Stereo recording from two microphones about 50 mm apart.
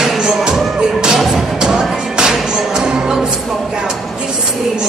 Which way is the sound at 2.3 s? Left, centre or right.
Centre.